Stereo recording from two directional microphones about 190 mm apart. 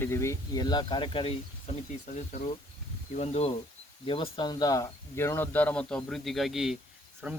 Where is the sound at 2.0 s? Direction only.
40° left (ahead or behind); by 6.7 s centre (ahead or behind).